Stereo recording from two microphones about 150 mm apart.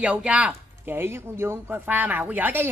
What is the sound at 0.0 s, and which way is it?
Speech, 10° right (ahead or behind).